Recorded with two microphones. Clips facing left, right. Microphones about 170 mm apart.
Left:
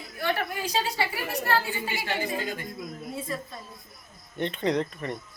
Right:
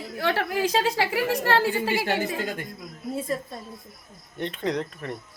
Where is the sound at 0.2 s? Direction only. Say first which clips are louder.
Right 4 dB; 85° right.